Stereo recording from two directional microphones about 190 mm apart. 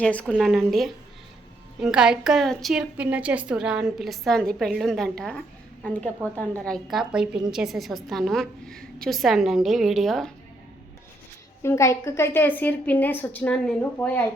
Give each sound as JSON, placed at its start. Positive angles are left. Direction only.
{"t": 0.0, "sound": "a woman's voice", "side_deg": 5}
{"t": 11.6, "sound": "a woman's voice", "side_deg": 15}